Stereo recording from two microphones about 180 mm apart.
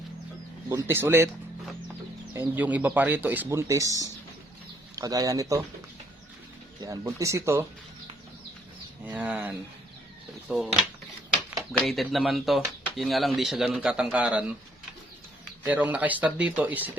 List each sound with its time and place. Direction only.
0.7 s speech: 15° right (ahead or behind)
2.3 s speech: 10° right (ahead or behind)
6.8 s speech: 20° right (ahead or behind)
9.0 s speech: 10° right (ahead or behind)
15.6 s speech: 10° right (ahead or behind)